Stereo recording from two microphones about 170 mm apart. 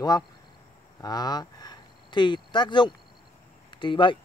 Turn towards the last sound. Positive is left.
turn(degrees=30)  # may be behind; listen again after turning